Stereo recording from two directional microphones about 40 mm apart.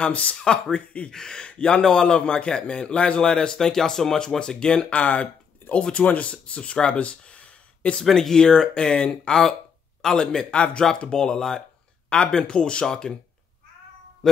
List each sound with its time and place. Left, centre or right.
0.1 s speech: left
0.4 s a man's voice: left
0.7 s speech: left
1.1 s a man's voice: centre
1.9 s speech: centre
2.1 s a man's voice: left
5.0 s speech: left
8.0 s a man's voice: centre; by 10.9 s left
11.1 s a man's voice: centre
14.2 s music: centre